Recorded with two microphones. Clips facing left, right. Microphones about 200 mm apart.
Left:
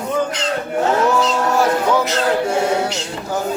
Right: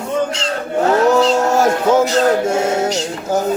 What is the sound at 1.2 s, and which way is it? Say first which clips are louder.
Speech: right 4 dB; 45° right (ahead or behind).